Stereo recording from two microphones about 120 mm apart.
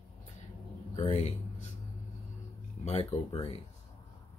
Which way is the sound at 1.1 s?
80° left.